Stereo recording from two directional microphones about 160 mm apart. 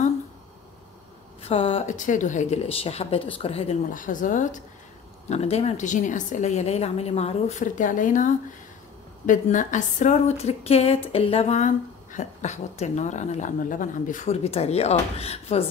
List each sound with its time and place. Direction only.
1.4 s speech: 35° left (ahead or behind)
2.0 s speech: 50° left (ahead or behind)
3.9 s speech: 55° left (ahead or behind)
5.3 s a woman's voice: 40° left (ahead or behind)